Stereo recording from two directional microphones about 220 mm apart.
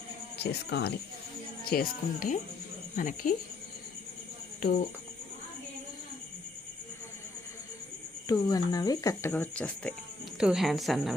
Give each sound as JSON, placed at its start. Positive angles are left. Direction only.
{"t": 0.3, "sound": "speech", "side_deg": 50}
{"t": 8.3, "sound": "a woman's voice", "side_deg": 15}